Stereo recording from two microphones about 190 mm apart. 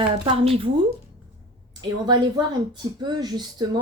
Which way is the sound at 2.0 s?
25° right (ahead or behind).